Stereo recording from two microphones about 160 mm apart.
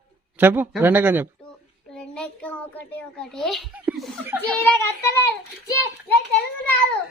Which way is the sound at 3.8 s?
Centre (ahead or behind).